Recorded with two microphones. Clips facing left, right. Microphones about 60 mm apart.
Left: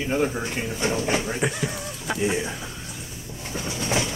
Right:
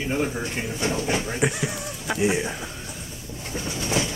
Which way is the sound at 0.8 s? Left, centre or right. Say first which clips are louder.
Left 1 dB; centre.